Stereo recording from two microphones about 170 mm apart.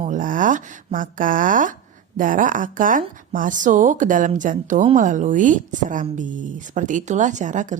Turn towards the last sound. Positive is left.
turn(degrees=-45)  # may be behind; listen again after turning